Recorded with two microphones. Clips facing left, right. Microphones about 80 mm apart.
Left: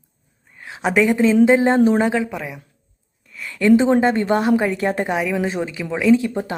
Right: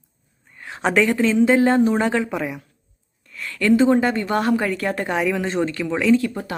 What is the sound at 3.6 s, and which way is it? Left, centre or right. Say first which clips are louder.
Speech: left 2 dB; left.